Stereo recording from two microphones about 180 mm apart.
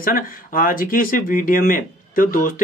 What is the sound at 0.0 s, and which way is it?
Speech, 50° left (ahead or behind).